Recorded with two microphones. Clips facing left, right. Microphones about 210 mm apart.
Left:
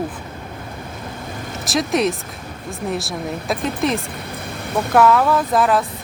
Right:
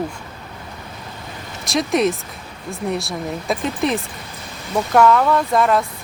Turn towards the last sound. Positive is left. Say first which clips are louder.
# even
turn(degrees=0)  # may be behind; listen again after turning